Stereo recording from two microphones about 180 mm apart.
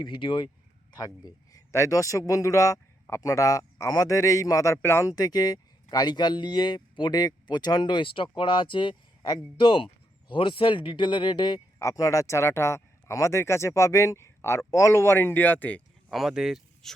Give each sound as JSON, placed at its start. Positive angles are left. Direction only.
{"t": 0.0, "sound": "a man's voice", "side_deg": 25}
{"t": 16.0, "sound": "speech", "side_deg": -5}